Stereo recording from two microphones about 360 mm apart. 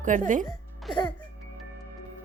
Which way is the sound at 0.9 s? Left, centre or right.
Centre.